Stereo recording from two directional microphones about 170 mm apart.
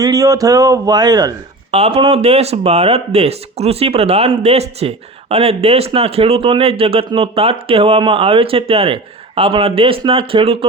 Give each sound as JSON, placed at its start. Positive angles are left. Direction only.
{"t": 0.0, "sound": "speech", "side_deg": -20}
{"t": 1.7, "sound": "speech", "side_deg": -35}